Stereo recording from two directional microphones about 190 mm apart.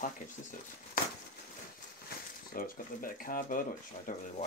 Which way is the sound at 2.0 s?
50° left (ahead or behind).